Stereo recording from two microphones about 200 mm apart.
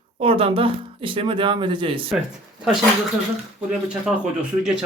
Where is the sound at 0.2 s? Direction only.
30° right (ahead or behind).